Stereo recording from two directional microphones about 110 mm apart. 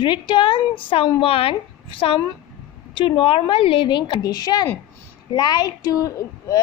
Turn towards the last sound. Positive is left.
turn(degrees=30)  # may be behind; listen again after turning